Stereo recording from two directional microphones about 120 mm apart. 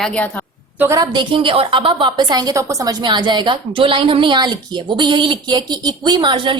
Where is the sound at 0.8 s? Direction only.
30° right (ahead or behind).